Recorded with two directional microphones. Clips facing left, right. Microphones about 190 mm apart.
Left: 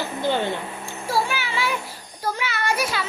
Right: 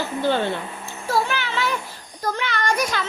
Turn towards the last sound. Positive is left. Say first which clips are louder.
# right 1 dB
turn(degrees=5)  # may be behind; listen again after turning